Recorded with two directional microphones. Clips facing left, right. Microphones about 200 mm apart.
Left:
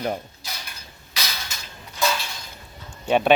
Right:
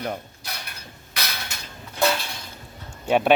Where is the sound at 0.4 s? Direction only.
60° right (ahead or behind).